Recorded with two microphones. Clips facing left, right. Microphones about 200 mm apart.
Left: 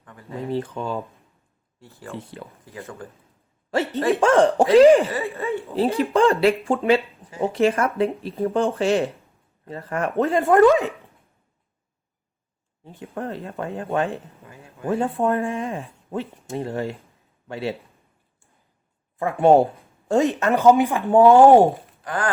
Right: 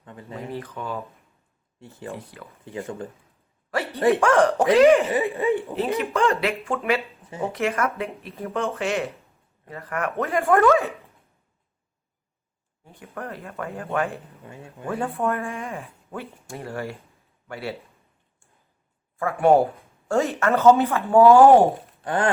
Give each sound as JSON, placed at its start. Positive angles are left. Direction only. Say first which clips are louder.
{"t": 0.0, "sound": "speech", "louder": "right 2 dB", "side_deg": -25}
{"t": 0.3, "sound": "speech", "louder": "left 6 dB", "side_deg": 30}
{"t": 2.1, "sound": "speech", "louder": "left 4 dB", "side_deg": 30}
{"t": 4.2, "sound": "speech", "louder": "left 2 dB", "side_deg": 30}
{"t": 5.0, "sound": "speech", "louder": "right 4 dB", "side_deg": -15}
{"t": 5.7, "sound": "speech", "louder": "left 4 dB", "side_deg": 30}
{"t": 12.8, "sound": "speech", "louder": "left 5 dB", "side_deg": 25}
{"t": 14.4, "sound": "speech", "louder": "right 2 dB", "side_deg": -30}
{"t": 14.8, "sound": "speech", "louder": "left 4 dB", "side_deg": 25}
{"t": 19.2, "sound": "speech", "louder": "left 2 dB", "side_deg": 25}
{"t": 22.0, "sound": "speech", "louder": "right 3 dB", "side_deg": -30}